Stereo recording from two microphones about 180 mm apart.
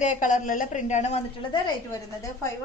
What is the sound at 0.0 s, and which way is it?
A woman's voice, 45° left (ahead or behind).